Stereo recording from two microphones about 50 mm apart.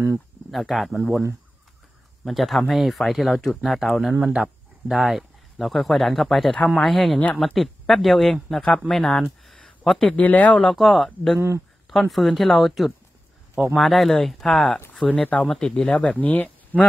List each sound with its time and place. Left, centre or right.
0.5 s speech: centre
2.2 s speech: centre
9.4 s a sound: centre
9.9 s speech: left
10.7 s speech: centre
11.3 s speech: right
11.9 s speech: centre
16.2 s speech: left